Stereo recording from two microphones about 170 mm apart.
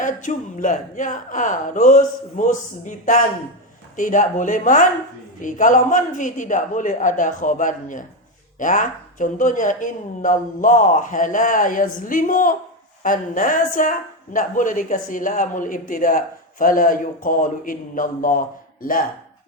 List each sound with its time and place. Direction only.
0.0 s speech: 45° left (ahead or behind)